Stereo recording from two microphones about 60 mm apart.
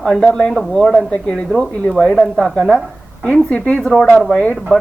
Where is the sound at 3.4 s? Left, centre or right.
Centre.